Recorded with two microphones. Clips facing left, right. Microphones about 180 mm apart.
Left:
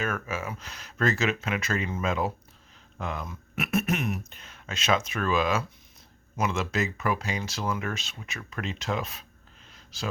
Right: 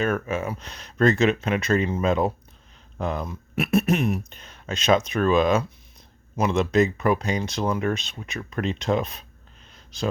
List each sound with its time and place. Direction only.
0.0 s speech: 35° right (ahead or behind)